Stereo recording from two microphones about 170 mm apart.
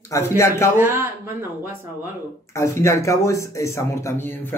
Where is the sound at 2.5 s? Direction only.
15° left (ahead or behind).